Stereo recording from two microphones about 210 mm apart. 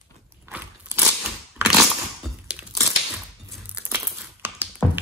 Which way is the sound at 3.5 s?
10° right (ahead or behind).